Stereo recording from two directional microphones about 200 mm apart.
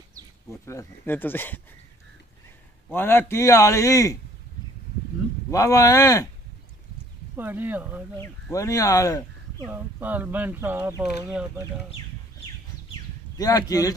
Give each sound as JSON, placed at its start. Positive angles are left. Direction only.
{"t": 0.5, "sound": "a man's voice", "side_deg": 15}
{"t": 2.9, "sound": "a man's voice", "side_deg": 10}
{"t": 5.5, "sound": "a man's voice", "side_deg": 15}
{"t": 7.3, "sound": "speech", "side_deg": -10}
{"t": 8.2, "sound": "a man's voice", "side_deg": 15}
{"t": 9.7, "sound": "speech", "side_deg": -10}
{"t": 13.4, "sound": "a man's voice", "side_deg": 20}